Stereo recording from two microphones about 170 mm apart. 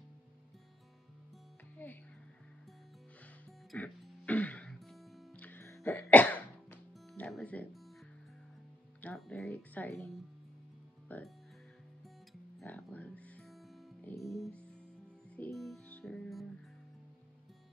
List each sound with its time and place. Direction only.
1.8 s speech: 10° left (ahead or behind)
3.7 s music: 10° left (ahead or behind)
9.0 s music: 5° left (ahead or behind)
9.5 s speech: 10° left (ahead or behind)
11.1 s speech: 10° left (ahead or behind)
12.5 s music: 10° left (ahead or behind)